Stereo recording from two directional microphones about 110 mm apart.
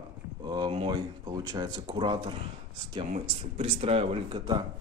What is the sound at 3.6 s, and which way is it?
Speech, 65° right (ahead or behind).